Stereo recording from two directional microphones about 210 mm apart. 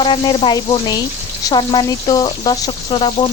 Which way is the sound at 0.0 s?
25° left (ahead or behind).